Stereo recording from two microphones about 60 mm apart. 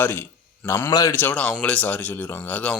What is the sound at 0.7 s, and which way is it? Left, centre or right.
Speech, left.